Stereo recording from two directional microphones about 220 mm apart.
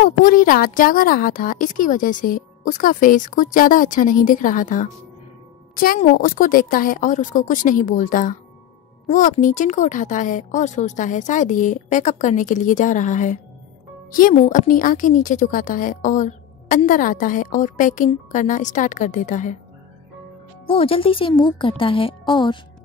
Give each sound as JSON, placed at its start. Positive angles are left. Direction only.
{"t": 0.0, "sound": "a woman's voice", "side_deg": 40}
{"t": 20.6, "sound": "speech", "side_deg": 25}